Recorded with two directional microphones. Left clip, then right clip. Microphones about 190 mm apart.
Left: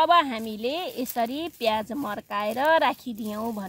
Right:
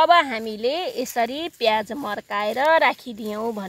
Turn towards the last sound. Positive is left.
turn(degrees=-40)  # may be behind; listen again after turning